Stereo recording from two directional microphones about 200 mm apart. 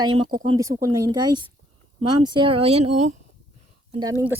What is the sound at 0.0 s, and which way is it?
Speech, 25° right (ahead or behind).